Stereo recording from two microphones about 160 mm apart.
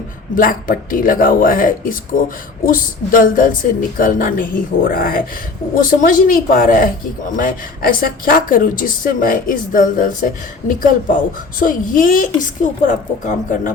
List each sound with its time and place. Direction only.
0.3 s a woman's voice: 60° left (ahead or behind)